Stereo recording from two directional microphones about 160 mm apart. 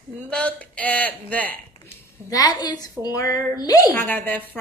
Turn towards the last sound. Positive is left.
turn(degrees=10)  # may be behind; listen again after turning